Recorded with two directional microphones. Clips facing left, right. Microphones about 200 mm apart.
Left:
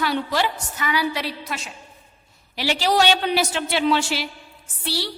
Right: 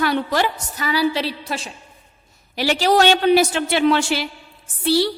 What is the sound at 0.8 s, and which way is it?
Speech, 30° right (ahead or behind).